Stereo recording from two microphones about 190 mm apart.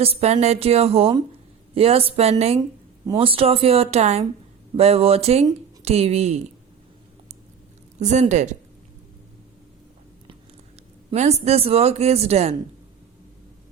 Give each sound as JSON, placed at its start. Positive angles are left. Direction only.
{"t": 0.0, "sound": "speech", "side_deg": -35}
{"t": 7.9, "sound": "speech", "side_deg": -35}
{"t": 11.1, "sound": "speech", "side_deg": -35}